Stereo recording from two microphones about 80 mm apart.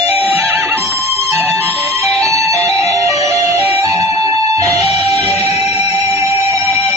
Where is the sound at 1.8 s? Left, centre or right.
Right.